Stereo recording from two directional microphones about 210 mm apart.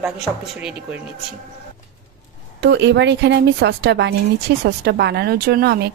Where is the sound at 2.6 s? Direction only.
55° right (ahead or behind).